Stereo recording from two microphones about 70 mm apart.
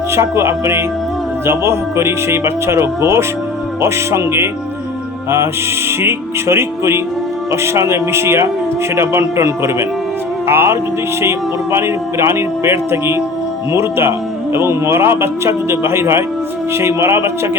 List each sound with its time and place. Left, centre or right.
0.1 s a man's voice: right
6.0 s a man's voice: right
10.4 s music: right
11.2 s a man's voice: right